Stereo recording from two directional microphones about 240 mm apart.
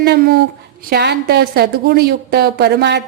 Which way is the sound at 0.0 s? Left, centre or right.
Right.